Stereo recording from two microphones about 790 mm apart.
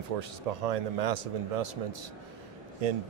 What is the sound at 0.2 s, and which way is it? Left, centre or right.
A man's voice, right.